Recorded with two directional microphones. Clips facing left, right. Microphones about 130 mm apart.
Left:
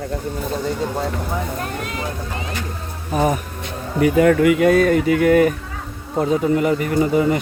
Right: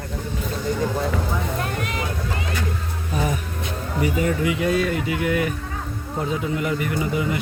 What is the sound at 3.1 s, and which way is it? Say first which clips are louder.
Speech: left 7 dB; 45° left (ahead or behind).